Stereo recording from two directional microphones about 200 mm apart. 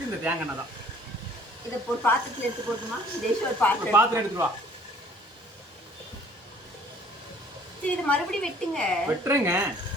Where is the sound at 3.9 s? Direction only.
15° right (ahead or behind).